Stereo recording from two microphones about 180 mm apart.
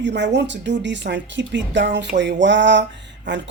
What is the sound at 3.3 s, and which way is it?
Speech, 80° right.